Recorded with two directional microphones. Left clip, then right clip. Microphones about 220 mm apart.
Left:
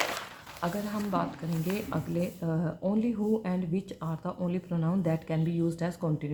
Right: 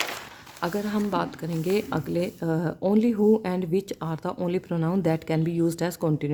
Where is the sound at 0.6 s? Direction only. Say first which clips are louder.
Right 6 dB; 50° right (ahead or behind).